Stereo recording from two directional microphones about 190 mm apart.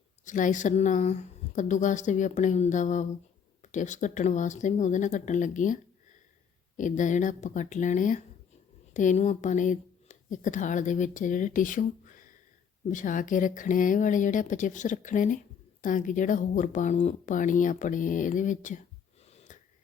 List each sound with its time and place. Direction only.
0.3 s speech: 40° left (ahead or behind)